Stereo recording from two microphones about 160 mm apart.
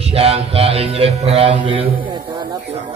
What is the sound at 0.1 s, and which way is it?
Mantra, 40° right (ahead or behind).